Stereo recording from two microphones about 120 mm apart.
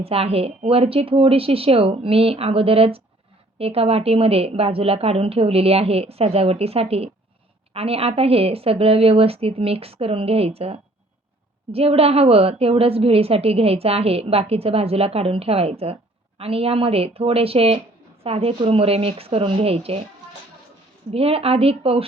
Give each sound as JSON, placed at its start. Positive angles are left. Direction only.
{"t": 0.0, "sound": "a woman's voice", "side_deg": -55}
{"t": 21.1, "sound": "a woman's voice", "side_deg": -55}